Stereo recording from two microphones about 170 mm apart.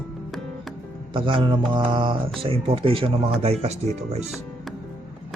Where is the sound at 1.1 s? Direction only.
30° right (ahead or behind).